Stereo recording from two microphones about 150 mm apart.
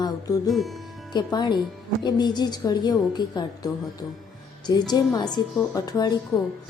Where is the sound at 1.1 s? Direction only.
30° left (ahead or behind).